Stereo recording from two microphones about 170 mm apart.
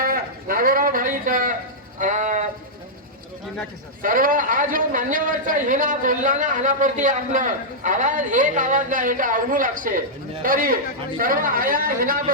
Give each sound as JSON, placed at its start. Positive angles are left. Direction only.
{"t": 0.0, "sound": "a sound", "side_deg": -60}
{"t": 2.0, "sound": "sheep", "side_deg": -50}
{"t": 4.0, "sound": "a man's voice", "side_deg": -55}